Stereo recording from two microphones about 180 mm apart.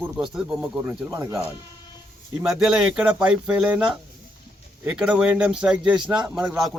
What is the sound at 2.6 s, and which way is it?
Speech, 5° right (ahead or behind).